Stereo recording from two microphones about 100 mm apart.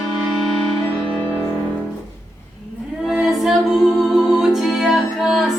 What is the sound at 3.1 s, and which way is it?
Singing, 5° right (ahead or behind).